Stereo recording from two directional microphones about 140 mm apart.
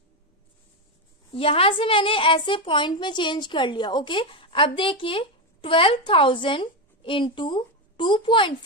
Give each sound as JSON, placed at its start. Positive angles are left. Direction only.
{"t": 1.3, "sound": "a woman's voice", "side_deg": 40}